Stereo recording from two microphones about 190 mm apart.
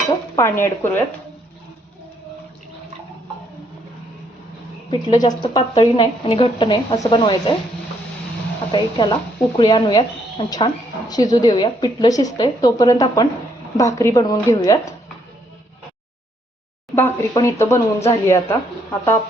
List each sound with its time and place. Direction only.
0.3 s speech: 15° left (ahead or behind)
4.9 s a woman's voice: 20° left (ahead or behind)
8.7 s a woman's voice: 25° left (ahead or behind)
16.9 s speech: 15° left (ahead or behind)